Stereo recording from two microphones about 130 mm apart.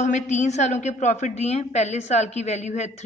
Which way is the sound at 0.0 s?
65° left (ahead or behind).